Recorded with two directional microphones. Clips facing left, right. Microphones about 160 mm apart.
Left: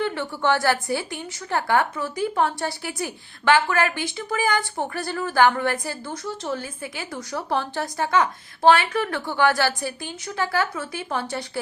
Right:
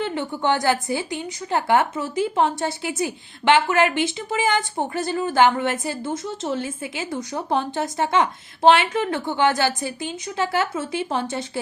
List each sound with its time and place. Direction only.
0.0 s a woman's voice: 20° right (ahead or behind)